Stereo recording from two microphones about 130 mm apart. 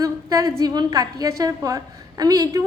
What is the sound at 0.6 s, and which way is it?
A woman's voice, 30° right (ahead or behind).